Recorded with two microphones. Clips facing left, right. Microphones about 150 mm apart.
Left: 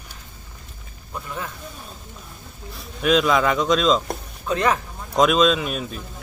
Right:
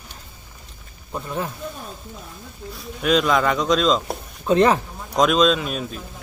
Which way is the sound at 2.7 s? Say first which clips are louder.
Even; centre (ahead or behind).